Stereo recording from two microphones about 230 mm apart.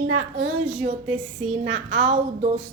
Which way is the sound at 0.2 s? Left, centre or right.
Right.